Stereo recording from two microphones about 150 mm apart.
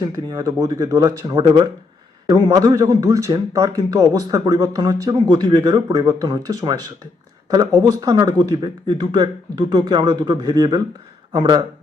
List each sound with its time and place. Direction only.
0.0 s a man's voice: 25° right (ahead or behind)